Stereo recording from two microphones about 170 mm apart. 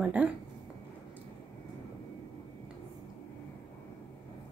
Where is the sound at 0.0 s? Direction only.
10° right (ahead or behind).